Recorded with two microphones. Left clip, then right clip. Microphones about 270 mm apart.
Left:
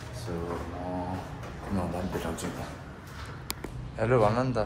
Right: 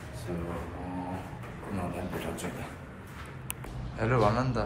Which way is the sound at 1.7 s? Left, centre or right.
Centre.